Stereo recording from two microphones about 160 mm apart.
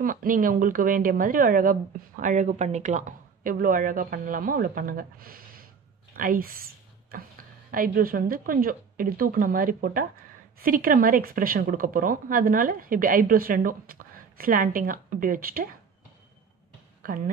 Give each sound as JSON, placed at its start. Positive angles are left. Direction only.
{"t": 0.0, "sound": "a woman's voice", "side_deg": -60}
{"t": 17.0, "sound": "a woman's voice", "side_deg": -60}